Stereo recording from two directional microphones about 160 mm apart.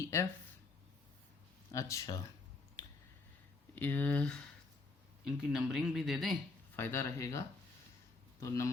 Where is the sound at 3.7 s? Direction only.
10° left (ahead or behind).